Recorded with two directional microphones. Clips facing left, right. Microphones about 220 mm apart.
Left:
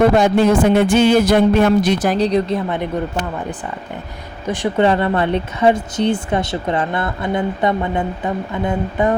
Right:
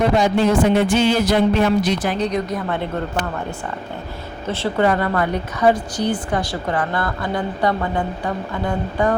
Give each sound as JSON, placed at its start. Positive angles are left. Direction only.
{"t": 0.2, "sound": "speech", "side_deg": 55}
{"t": 2.6, "sound": "speech", "side_deg": 20}
{"t": 4.4, "sound": "speech", "side_deg": 15}